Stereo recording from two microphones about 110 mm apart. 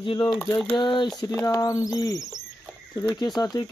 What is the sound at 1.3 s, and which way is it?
Speech, 30° left (ahead or behind).